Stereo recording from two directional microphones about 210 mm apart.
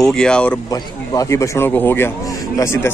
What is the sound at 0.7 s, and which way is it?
A man's voice, 15° left (ahead or behind).